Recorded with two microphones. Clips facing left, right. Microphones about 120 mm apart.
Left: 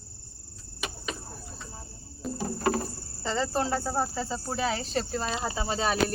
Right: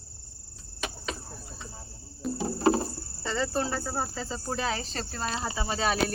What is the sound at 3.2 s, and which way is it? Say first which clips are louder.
Cricket: left 1 dB; 30° left (ahead or behind).